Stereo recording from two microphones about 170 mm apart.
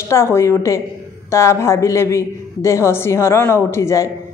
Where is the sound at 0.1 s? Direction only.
15° left (ahead or behind).